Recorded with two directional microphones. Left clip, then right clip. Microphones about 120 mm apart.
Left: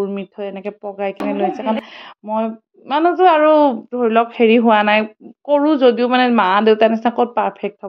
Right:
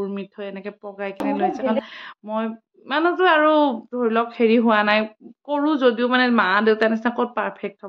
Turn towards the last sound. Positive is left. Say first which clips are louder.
# left 6 dB
turn(degrees=35)  # may be behind; listen again after turning